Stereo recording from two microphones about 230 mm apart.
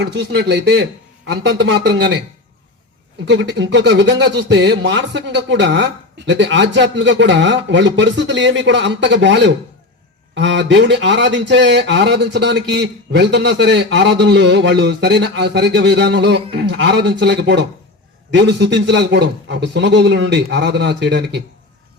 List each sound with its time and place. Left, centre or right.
0.0 s speech: right
3.2 s speech: right